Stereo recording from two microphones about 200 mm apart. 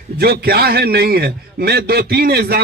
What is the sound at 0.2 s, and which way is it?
A man's voice, 50° right (ahead or behind).